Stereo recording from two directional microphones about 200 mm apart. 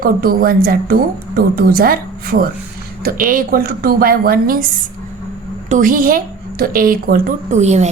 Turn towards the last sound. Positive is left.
turn(degrees=-35)  # may be behind; listen again after turning